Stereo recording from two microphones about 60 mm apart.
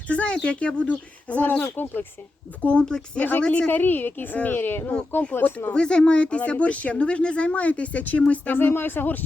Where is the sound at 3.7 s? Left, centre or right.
Left.